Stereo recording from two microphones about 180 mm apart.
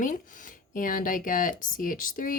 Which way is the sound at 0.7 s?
50° left (ahead or behind).